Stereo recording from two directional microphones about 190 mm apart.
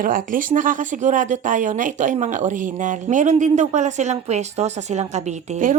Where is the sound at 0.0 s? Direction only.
45° right (ahead or behind).